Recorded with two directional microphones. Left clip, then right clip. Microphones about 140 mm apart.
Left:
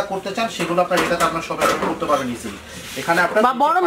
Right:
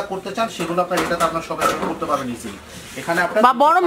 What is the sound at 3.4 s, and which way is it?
Speech, 40° right (ahead or behind).